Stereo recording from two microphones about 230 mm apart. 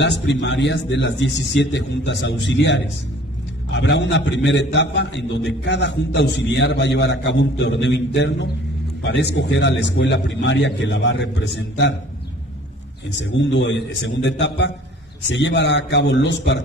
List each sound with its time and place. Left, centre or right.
0.0 s a man's voice: left
13.2 s a man's voice: left